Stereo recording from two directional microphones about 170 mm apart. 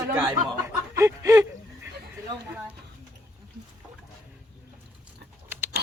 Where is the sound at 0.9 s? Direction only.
20° right (ahead or behind).